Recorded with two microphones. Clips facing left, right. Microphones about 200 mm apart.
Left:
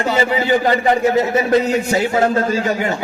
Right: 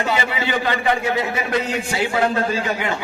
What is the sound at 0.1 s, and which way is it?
A man's voice, 40° left (ahead or behind).